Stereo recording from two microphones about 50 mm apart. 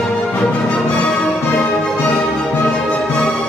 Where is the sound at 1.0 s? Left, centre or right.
Centre.